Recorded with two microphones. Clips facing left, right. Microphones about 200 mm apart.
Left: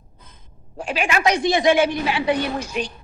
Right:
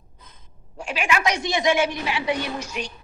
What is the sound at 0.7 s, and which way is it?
A woman's voice, 35° left (ahead or behind).